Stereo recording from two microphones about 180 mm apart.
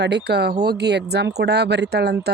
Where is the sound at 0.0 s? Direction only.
65° right (ahead or behind).